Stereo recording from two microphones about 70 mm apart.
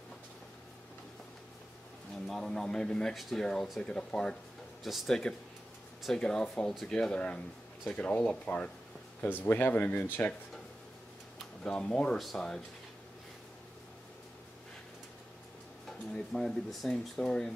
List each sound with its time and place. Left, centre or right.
2.2 s speech: centre
3.8 s speech: centre
4.8 s speech: centre; by 10.0 s left
11.6 s speech: centre
16.1 s speech: centre